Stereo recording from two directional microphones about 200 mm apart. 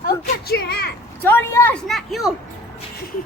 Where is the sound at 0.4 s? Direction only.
50° left (ahead or behind).